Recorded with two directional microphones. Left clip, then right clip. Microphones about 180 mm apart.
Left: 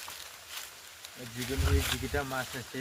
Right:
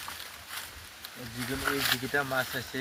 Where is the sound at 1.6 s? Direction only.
20° right (ahead or behind).